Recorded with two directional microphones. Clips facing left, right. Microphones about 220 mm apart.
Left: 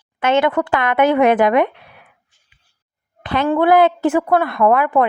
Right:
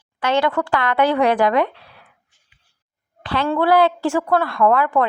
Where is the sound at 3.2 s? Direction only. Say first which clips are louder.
Left 3 dB; 20° left (ahead or behind).